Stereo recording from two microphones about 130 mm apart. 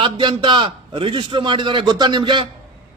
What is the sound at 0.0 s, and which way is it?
A man's voice, 40° right (ahead or behind).